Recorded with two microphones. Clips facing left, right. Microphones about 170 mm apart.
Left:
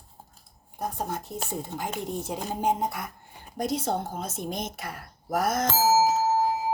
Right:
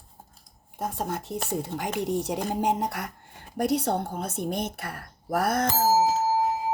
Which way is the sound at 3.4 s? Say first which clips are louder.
Right 4 dB; 70° right (ahead or behind).